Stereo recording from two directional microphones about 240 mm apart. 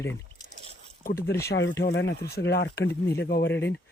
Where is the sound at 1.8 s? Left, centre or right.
Left.